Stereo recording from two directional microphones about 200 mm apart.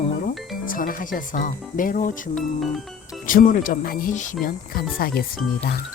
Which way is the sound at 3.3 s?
40° left (ahead or behind).